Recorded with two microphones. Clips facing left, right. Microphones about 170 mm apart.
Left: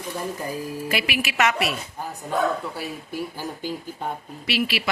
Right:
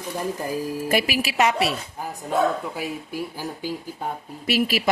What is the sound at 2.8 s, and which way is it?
Speech, 10° right (ahead or behind).